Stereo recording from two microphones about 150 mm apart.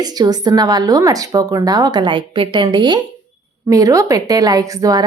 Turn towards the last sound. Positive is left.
turn(degrees=-25)  # may be behind; listen again after turning